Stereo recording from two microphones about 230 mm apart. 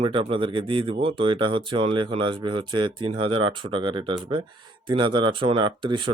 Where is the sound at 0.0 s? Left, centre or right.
Right.